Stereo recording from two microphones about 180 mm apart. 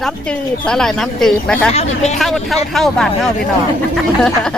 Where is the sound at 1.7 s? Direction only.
40° left (ahead or behind).